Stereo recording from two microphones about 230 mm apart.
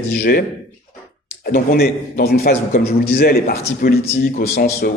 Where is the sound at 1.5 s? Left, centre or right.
Left.